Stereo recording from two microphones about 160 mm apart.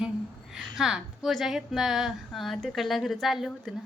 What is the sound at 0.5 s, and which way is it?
A woman's voice, 5° right (ahead or behind).